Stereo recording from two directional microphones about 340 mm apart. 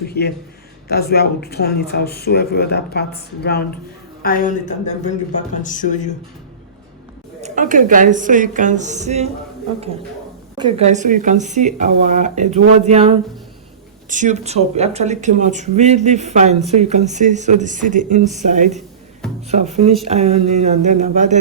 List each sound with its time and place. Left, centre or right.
0.1 s speech: left
7.4 s speech: right
10.6 s speech: centre